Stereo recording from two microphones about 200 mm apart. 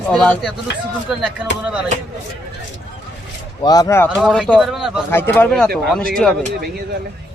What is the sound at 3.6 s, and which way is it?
Speech, 20° left (ahead or behind).